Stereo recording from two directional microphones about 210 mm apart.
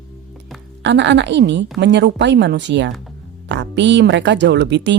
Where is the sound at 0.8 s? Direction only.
55° right (ahead or behind).